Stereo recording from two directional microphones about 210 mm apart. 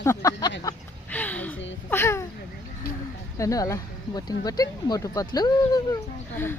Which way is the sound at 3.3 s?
15° left (ahead or behind).